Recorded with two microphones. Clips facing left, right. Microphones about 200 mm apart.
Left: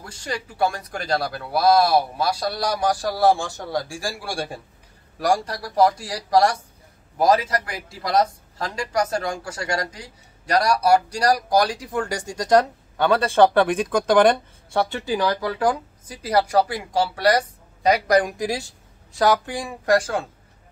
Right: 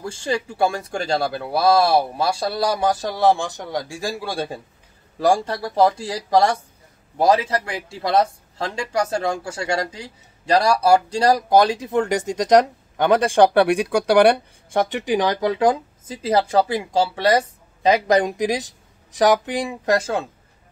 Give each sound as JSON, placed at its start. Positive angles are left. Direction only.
{"t": 0.0, "sound": "speech", "side_deg": -25}